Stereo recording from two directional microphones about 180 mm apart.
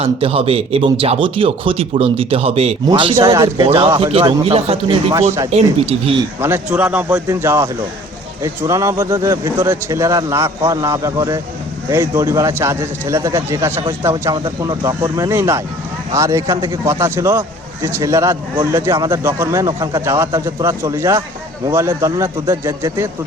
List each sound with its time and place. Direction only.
0.0 s speech: 35° right (ahead or behind)
3.2 s speech: 15° right (ahead or behind)
3.9 s speech: 30° right (ahead or behind)
6.4 s speech: 10° right (ahead or behind)